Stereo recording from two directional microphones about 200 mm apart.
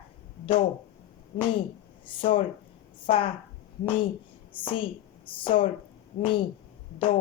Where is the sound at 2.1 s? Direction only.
25° left (ahead or behind).